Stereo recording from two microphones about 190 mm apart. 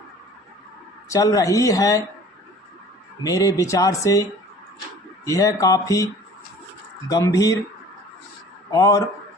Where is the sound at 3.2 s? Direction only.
15° left (ahead or behind).